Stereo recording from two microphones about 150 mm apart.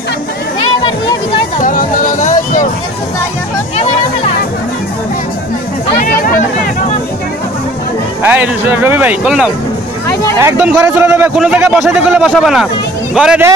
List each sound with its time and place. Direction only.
0.8 s music: 30° left (ahead or behind)
1.6 s music: 65° left (ahead or behind)
5.9 s a sound: 70° left (ahead or behind)
8.2 s speech: 10° right (ahead or behind)